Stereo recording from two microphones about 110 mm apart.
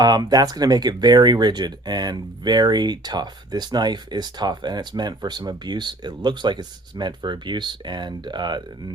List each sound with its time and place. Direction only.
0.0 s speech: 40° right (ahead or behind)